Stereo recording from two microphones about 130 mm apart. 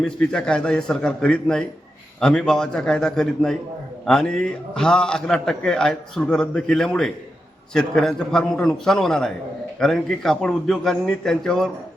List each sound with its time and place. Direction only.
0.0 s a man's voice: 5° left (ahead or behind)